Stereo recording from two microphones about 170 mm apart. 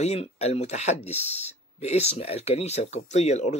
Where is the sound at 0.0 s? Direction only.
40° left (ahead or behind).